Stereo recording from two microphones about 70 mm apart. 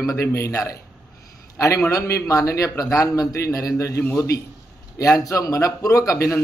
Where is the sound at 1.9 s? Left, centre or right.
Left.